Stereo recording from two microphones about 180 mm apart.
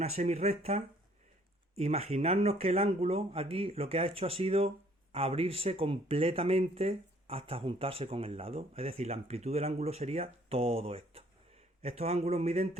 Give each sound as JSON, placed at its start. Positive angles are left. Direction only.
{"t": 0.0, "sound": "speech", "side_deg": -40}